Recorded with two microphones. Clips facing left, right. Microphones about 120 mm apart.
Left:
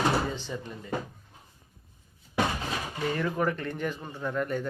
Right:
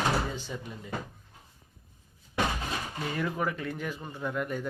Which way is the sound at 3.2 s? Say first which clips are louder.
Left 1 dB; 5° right (ahead or behind).